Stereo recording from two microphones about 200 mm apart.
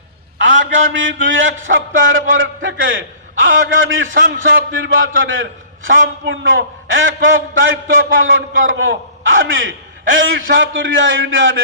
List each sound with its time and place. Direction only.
0.3 s a man's voice: 70° right (ahead or behind)